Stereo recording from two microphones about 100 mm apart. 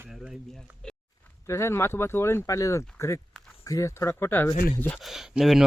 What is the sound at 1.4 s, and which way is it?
Speech, 30° left (ahead or behind).